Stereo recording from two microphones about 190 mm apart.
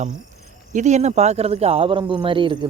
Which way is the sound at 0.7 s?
40° right (ahead or behind).